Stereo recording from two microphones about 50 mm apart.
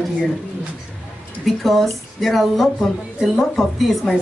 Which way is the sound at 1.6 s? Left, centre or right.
Centre.